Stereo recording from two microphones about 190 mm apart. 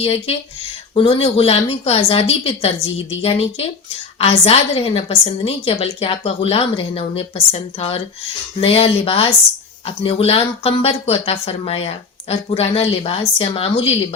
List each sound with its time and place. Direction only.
0.0 s speech: 30° left (ahead or behind)